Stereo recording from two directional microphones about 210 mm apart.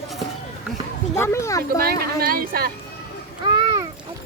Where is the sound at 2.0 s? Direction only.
45° right (ahead or behind).